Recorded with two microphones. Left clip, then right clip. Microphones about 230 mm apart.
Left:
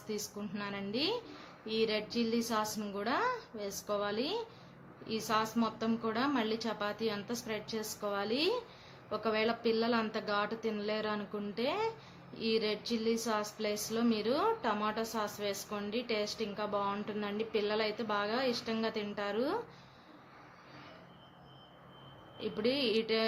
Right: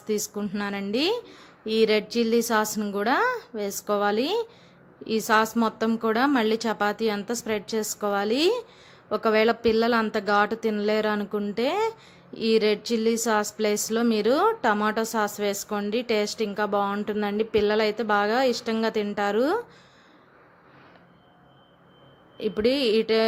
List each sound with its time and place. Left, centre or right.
0.1 s speech: right
22.4 s speech: right